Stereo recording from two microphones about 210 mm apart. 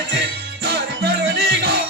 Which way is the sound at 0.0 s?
55° right (ahead or behind).